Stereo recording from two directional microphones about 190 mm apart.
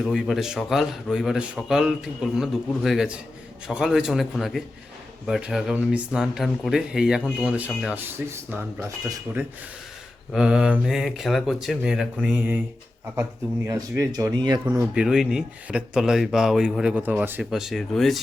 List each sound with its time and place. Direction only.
0.0 s speech: centre (ahead or behind); by 9.2 s 15° right (ahead or behind)
10.3 s speech: 5° right (ahead or behind)
13.7 s speech: 15° right (ahead or behind)
14.6 s speech: 10° right (ahead or behind)